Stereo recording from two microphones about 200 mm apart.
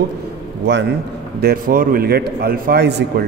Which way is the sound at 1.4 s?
45° right (ahead or behind).